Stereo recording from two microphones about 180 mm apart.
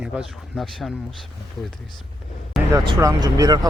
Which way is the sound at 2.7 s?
20° right (ahead or behind).